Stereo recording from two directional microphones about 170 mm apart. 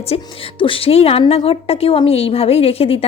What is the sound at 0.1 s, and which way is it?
A woman's voice, 35° left (ahead or behind).